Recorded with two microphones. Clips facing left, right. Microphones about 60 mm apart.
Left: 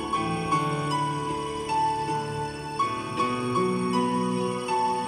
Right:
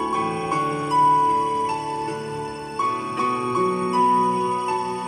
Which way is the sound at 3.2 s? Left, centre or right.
Right.